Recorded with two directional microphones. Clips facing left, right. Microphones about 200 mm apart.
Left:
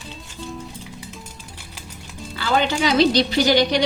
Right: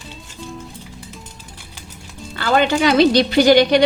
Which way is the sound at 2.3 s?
55° right (ahead or behind).